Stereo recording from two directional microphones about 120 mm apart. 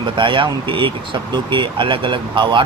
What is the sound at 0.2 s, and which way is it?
Speech, 45° right (ahead or behind).